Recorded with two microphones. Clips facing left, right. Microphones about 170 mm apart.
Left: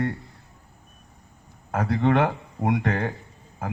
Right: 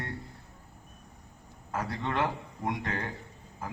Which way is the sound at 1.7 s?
60° left (ahead or behind).